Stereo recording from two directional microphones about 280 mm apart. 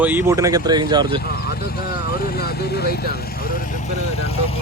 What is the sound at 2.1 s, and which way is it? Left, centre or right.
Vehicle, left.